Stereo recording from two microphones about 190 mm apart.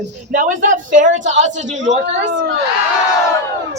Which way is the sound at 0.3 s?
45° right (ahead or behind).